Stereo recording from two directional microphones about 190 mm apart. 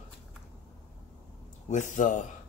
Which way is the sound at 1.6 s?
40° left (ahead or behind).